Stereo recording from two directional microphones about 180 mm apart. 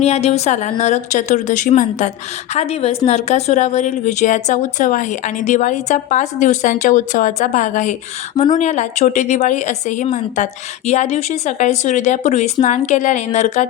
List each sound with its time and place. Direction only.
0.0 s a woman's voice: 35° left (ahead or behind)